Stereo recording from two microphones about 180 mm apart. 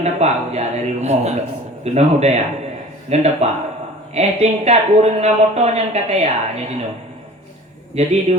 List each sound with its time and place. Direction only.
0.0 s speech: 40° right (ahead or behind)
8.0 s speech: 35° right (ahead or behind)